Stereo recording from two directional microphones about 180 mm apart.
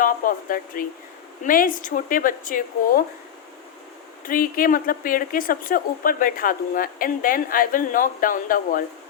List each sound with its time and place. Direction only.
0.0 s a woman's voice: 50° left (ahead or behind)
4.3 s a woman's voice: 50° left (ahead or behind)